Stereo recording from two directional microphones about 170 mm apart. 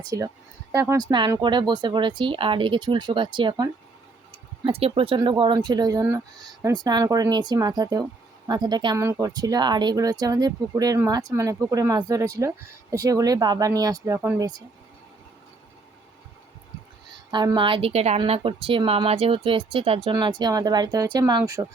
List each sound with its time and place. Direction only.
0.1 s speech: 20° right (ahead or behind)
17.3 s speech: 25° right (ahead or behind)